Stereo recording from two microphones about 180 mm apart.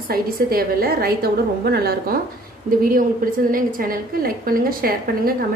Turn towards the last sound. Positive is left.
turn(degrees=-55)  # may be behind; listen again after turning